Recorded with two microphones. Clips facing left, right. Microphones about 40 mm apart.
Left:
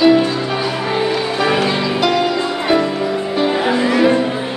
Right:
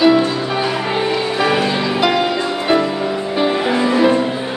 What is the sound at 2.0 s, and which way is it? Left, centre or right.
Music, centre.